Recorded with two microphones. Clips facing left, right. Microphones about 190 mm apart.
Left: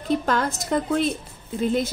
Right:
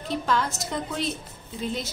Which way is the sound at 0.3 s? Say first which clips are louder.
Left 4 dB; 50° left (ahead or behind).